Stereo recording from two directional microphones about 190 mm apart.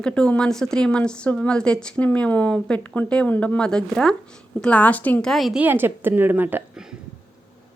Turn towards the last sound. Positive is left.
turn(degrees=-5)  # may be behind; listen again after turning